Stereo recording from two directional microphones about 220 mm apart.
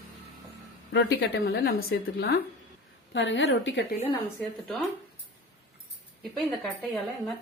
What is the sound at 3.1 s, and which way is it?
Speech, 55° left (ahead or behind).